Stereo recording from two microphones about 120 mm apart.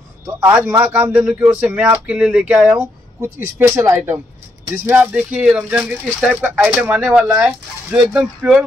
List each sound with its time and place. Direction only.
0.4 s speech: 20° right (ahead or behind)
3.2 s speech: 20° right (ahead or behind)
5.1 s speech: 10° right (ahead or behind)